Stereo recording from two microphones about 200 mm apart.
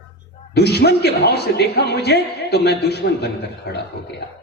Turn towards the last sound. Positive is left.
turn(degrees=55)  # may be behind; listen again after turning